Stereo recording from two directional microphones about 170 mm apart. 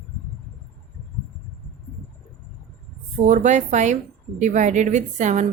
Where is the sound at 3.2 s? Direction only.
45° right (ahead or behind).